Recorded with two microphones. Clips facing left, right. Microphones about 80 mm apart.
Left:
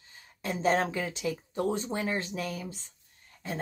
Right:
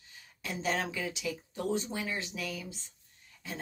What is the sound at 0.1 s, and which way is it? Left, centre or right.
Speech, left.